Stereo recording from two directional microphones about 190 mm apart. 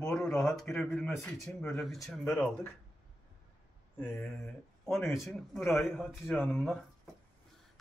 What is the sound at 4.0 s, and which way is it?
Speech, 10° left (ahead or behind).